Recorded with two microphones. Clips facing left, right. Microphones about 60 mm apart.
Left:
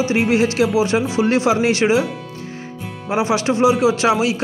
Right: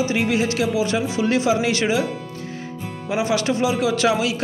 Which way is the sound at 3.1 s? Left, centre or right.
Left.